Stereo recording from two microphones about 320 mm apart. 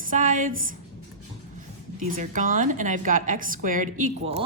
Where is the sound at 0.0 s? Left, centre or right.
Right.